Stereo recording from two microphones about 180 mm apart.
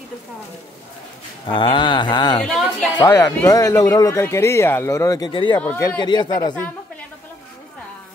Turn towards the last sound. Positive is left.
turn(degrees=10)  # may be behind; listen again after turning